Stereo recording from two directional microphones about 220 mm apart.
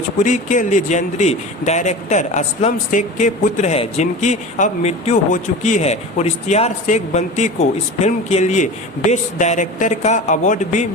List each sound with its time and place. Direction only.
0.2 s speech: 35° left (ahead or behind)